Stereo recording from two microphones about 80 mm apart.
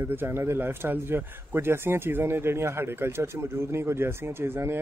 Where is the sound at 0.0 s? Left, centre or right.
Right.